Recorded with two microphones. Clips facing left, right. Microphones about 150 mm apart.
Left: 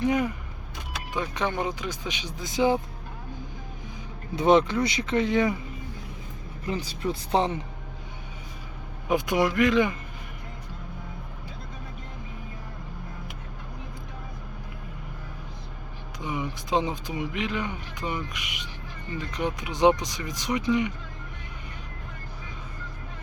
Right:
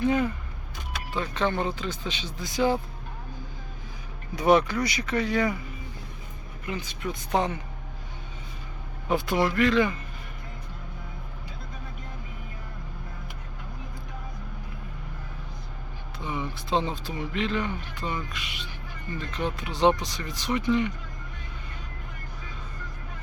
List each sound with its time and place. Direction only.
0.0 s speech: 15° left (ahead or behind)
4.4 s speech: 25° left (ahead or behind)
6.7 s speech: 35° left (ahead or behind)
9.0 s speech: 15° left (ahead or behind)
16.2 s speech: 15° left (ahead or behind)